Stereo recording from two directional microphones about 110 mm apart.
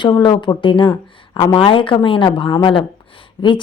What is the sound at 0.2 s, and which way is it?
A woman's voice, 45° left (ahead or behind).